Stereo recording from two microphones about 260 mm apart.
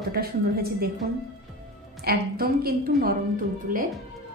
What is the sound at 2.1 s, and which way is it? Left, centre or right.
A woman's voice, right.